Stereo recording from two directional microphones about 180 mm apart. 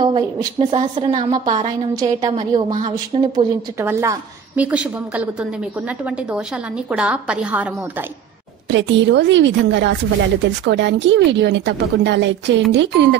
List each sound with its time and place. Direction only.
0.0 s a woman's voice: 25° right (ahead or behind); by 7.7 s 5° right (ahead or behind)
8.6 s a woman's voice: 85° right